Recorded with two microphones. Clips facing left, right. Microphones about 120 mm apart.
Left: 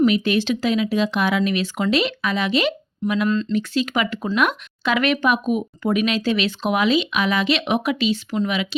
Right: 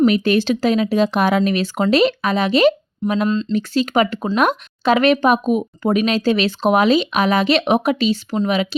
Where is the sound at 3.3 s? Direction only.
25° right (ahead or behind).